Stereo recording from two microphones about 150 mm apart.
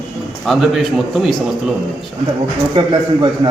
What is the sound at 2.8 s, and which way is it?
Speech, 30° right (ahead or behind).